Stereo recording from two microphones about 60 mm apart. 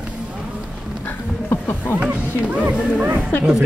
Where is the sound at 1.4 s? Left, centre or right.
Left.